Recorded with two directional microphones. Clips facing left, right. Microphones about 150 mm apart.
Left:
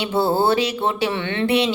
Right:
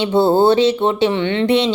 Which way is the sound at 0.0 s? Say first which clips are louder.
Right 6 dB; 20° right (ahead or behind).